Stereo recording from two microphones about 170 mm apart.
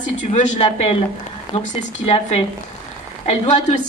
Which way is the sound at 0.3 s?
35° left (ahead or behind).